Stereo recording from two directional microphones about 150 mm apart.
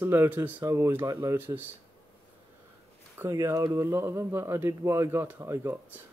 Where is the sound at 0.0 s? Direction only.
15° right (ahead or behind).